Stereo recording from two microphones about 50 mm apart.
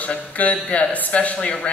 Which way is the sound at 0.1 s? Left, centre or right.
Left.